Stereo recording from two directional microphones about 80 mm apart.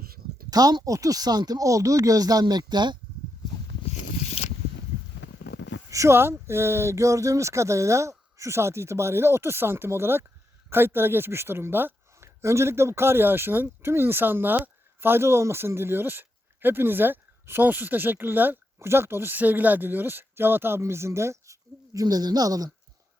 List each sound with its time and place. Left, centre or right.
0.5 s speech: right
5.9 s a woman's voice: right
22.0 s speech: right